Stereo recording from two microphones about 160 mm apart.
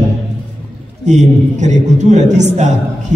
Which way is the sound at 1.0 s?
50° right (ahead or behind).